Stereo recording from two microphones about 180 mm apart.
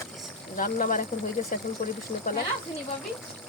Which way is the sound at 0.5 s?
45° left (ahead or behind).